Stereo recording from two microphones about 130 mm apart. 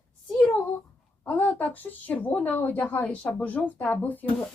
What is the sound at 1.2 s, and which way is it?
Speech, 10° left (ahead or behind).